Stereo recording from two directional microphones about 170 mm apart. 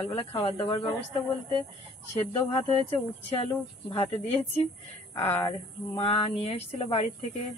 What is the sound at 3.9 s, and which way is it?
Speech, 35° left (ahead or behind).